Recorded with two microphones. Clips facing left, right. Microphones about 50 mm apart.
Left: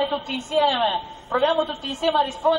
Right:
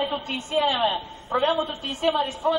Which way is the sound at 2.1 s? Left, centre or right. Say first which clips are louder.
Left 3 dB; centre.